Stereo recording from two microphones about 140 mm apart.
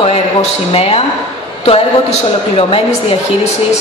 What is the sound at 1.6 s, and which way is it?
A woman's voice, 45° left (ahead or behind).